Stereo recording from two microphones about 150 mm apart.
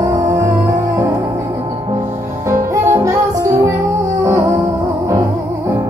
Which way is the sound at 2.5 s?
20° right (ahead or behind).